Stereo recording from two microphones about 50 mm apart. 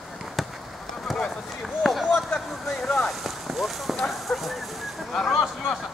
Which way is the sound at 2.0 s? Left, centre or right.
Centre.